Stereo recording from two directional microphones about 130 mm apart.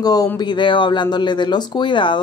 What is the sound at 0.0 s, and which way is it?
Speech, 30° left (ahead or behind).